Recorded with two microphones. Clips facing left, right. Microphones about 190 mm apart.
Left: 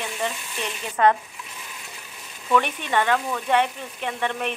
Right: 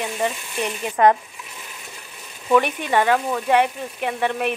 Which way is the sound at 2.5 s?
10° right (ahead or behind).